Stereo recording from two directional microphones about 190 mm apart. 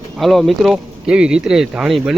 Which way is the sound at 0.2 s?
Centre (ahead or behind).